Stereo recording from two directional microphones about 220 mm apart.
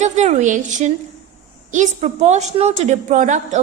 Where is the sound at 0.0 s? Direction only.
30° right (ahead or behind).